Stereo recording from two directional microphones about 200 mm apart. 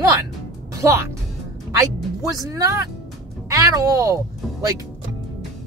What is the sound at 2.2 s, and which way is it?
Speech, 15° right (ahead or behind).